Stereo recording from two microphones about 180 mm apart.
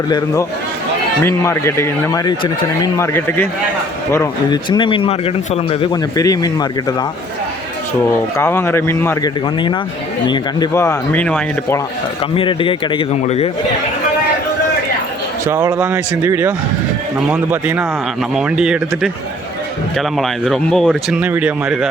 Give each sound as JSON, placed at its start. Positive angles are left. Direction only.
{"t": 1.2, "sound": "speech", "side_deg": 15}
{"t": 3.1, "sound": "speech", "side_deg": 10}
{"t": 8.4, "sound": "speech", "side_deg": 15}
{"t": 10.2, "sound": "speech", "side_deg": 25}
{"t": 12.3, "sound": "speech", "side_deg": 30}
{"t": 15.4, "sound": "speech", "side_deg": -15}